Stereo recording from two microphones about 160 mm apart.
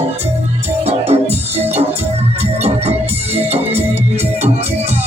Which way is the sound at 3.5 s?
40° right (ahead or behind).